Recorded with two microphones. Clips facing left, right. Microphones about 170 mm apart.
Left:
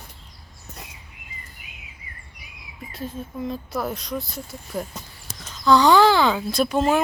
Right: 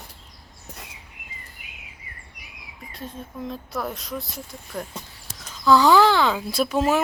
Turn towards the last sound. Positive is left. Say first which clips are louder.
# left 1 dB
turn(degrees=-5)  # may be behind; listen again after turning